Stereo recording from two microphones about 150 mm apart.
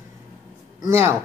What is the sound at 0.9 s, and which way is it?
Speech, 20° right (ahead or behind).